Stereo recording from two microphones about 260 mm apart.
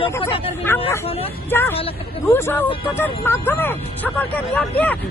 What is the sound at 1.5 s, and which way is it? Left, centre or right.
Speech, centre.